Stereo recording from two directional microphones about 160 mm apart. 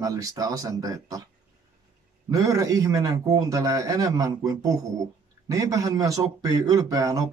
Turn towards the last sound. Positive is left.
turn(degrees=-20)  # may be behind; listen again after turning